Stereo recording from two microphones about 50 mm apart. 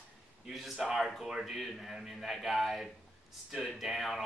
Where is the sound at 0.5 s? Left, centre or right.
Centre.